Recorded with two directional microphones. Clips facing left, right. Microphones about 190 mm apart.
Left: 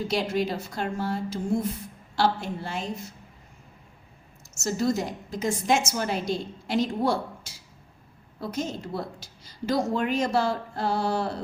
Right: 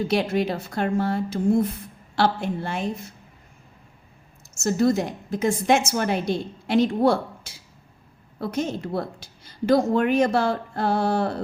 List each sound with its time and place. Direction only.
0.1 s a woman's voice: 60° right (ahead or behind)
4.6 s a woman's voice: 55° right (ahead or behind)